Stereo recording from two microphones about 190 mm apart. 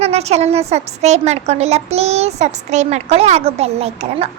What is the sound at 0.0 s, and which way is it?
A woman's voice, 35° right (ahead or behind).